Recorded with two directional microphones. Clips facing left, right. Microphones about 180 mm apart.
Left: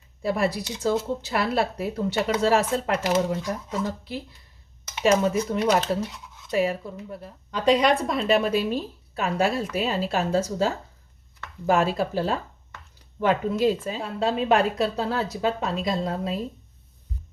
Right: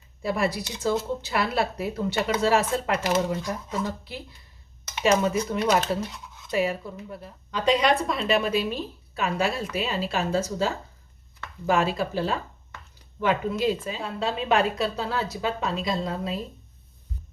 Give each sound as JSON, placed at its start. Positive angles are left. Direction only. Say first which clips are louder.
{"t": 0.2, "sound": "a woman's voice", "louder": "left 1 dB", "side_deg": 40}
{"t": 5.2, "sound": "a woman's voice", "louder": "left 2 dB", "side_deg": 35}